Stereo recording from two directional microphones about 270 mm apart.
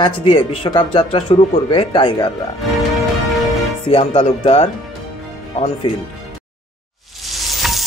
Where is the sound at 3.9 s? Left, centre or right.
Left.